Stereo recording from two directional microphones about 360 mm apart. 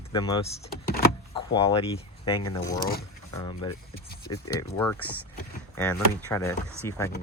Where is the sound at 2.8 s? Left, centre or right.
Left.